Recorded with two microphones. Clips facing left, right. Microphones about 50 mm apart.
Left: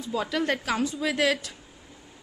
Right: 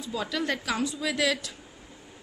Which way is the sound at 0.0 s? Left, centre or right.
Left.